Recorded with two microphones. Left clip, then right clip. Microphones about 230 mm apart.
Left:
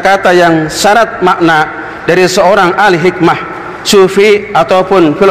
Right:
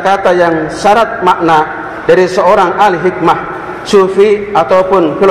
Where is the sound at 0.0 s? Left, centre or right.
Left.